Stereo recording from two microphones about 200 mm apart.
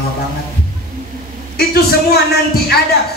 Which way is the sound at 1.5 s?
50° left (ahead or behind).